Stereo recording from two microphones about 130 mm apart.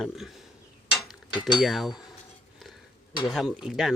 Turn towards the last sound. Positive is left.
turn(degrees=0)  # may be behind; listen again after turning